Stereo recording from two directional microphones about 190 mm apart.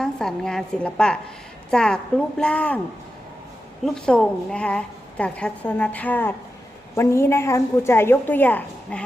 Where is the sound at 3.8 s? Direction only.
5° left (ahead or behind).